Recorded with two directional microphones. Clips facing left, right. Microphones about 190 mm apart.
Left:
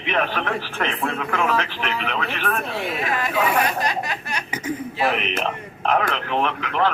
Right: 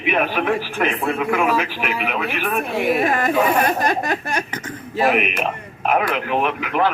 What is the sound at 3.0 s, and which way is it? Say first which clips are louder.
Speech: right 5 dB; 50° right (ahead or behind).